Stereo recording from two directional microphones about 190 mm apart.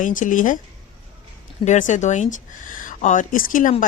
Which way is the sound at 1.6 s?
40° left (ahead or behind).